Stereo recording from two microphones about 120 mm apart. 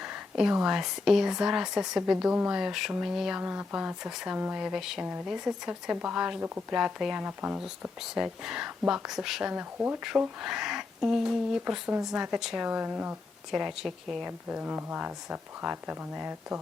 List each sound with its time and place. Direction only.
0.0 s speech: 5° right (ahead or behind)
6.7 s speech: 5° right (ahead or behind)
13.5 s speech: 5° right (ahead or behind)
14.5 s speech: 15° right (ahead or behind)